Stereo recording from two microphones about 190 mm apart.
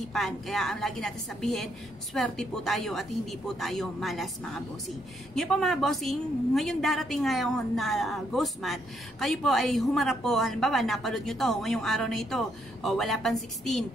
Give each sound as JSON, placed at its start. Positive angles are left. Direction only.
{"t": 0.1, "sound": "a woman's voice", "side_deg": 0}